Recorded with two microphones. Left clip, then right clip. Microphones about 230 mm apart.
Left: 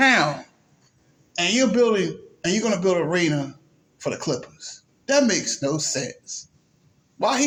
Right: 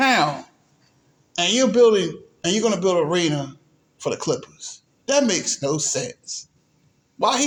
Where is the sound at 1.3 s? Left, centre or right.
Right.